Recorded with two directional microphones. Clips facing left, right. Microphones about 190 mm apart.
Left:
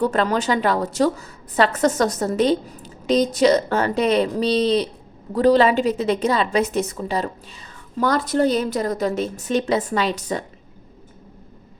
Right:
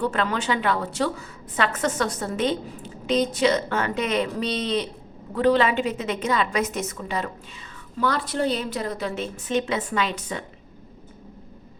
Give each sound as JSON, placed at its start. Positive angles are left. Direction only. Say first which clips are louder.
{"t": 0.0, "sound": "a woman's voice", "louder": "left 5 dB", "side_deg": 40}